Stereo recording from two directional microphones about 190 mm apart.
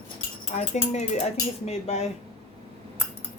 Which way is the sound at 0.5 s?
35° left (ahead or behind).